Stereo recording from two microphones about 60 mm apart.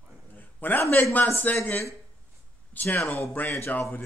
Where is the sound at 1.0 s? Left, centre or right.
Left.